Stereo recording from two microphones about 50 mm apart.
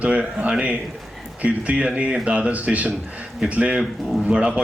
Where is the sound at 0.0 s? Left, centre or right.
Right.